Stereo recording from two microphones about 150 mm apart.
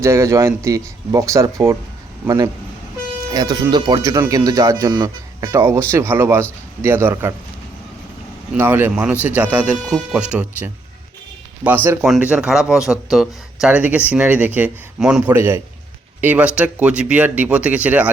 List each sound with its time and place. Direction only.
0.0 s speech: 20° right (ahead or behind)
3.3 s speech: 25° right (ahead or behind)
8.5 s speech: 15° right (ahead or behind)